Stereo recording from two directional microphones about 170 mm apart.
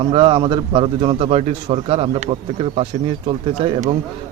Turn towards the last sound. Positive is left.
turn(degrees=-35)  # may be behind; listen again after turning